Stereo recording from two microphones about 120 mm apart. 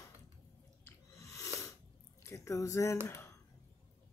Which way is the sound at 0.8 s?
25° left (ahead or behind).